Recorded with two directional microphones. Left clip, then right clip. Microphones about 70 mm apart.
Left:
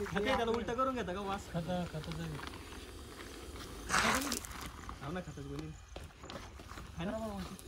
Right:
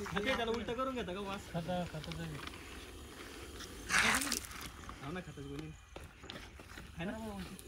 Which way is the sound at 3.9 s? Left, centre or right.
Left.